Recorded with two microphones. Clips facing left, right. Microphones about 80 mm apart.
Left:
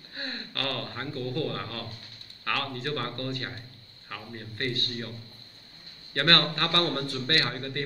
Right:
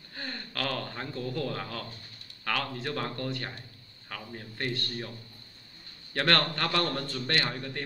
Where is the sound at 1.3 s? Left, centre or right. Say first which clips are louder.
Left 2 dB; centre.